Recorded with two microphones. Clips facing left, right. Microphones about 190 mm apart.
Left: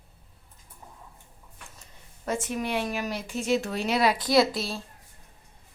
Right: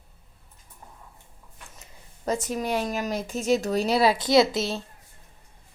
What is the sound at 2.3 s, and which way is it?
A woman's voice, 40° right (ahead or behind).